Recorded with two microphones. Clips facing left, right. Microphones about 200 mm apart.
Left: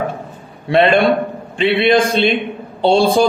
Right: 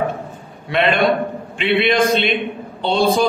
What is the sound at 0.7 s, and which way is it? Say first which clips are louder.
A man's voice: left 4 dB; 30° left (ahead or behind).